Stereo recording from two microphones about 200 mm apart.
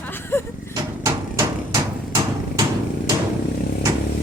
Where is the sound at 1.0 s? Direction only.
15° right (ahead or behind).